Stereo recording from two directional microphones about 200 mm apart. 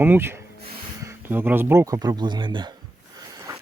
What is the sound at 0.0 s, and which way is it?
Speech, 10° right (ahead or behind).